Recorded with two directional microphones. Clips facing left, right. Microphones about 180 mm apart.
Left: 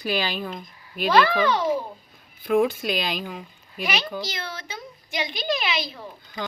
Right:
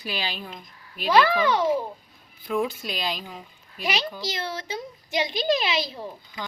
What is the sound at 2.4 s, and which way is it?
Speech, 65° left (ahead or behind).